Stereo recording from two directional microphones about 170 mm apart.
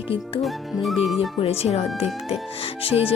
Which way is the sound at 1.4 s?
35° left (ahead or behind).